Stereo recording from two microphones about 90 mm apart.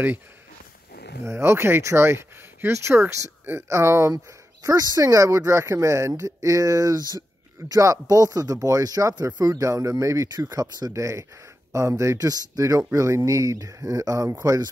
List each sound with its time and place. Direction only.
1.2 s speech: 30° right (ahead or behind)
4.6 s speech: 40° right (ahead or behind)